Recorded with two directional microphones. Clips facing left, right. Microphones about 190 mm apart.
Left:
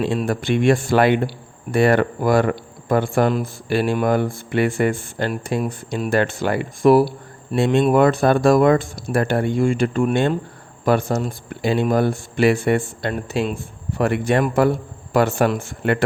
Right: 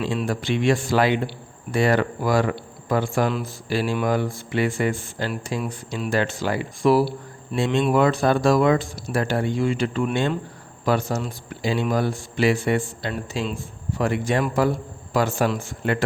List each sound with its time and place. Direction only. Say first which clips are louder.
0.0 s speech: left 4 dB; 55° left (ahead or behind)